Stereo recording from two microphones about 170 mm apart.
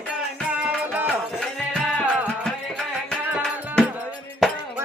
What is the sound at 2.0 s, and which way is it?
Music, 10° right (ahead or behind).